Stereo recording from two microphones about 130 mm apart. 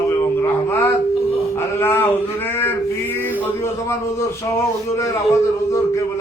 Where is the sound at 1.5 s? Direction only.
20° left (ahead or behind).